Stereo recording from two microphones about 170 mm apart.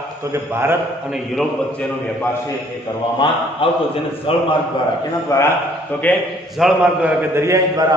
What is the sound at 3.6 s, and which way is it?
Speech, 30° left (ahead or behind).